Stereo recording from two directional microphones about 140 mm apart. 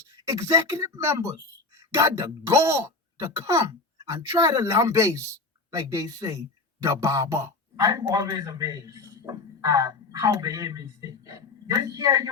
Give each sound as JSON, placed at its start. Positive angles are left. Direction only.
{"t": 0.3, "sound": "a man's voice", "side_deg": -25}